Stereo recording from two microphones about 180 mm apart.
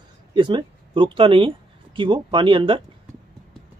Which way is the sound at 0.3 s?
25° right (ahead or behind).